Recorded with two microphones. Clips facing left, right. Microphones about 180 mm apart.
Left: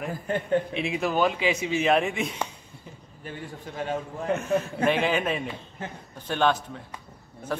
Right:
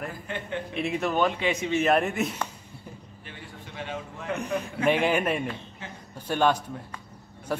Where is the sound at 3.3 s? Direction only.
40° left (ahead or behind).